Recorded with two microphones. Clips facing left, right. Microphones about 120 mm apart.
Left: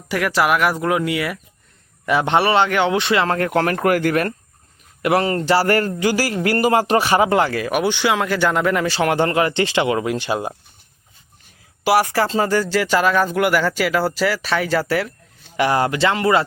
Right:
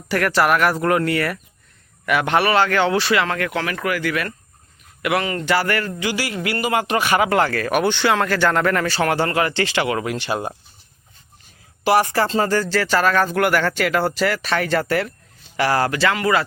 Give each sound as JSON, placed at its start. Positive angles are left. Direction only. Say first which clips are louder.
{"t": 0.1, "sound": "speech", "louder": "even", "side_deg": 10}
{"t": 2.0, "sound": "speech", "louder": "left 1 dB", "side_deg": 25}
{"t": 11.8, "sound": "speech", "louder": "even", "side_deg": 5}
{"t": 15.5, "sound": "speech", "louder": "left 1 dB", "side_deg": 20}